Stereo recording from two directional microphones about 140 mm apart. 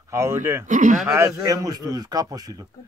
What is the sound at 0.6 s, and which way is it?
Speech, 65° right (ahead or behind).